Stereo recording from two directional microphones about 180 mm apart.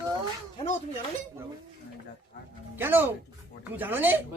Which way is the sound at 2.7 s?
10° right (ahead or behind).